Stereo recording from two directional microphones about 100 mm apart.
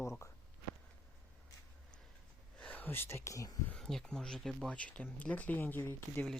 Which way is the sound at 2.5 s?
15° left (ahead or behind).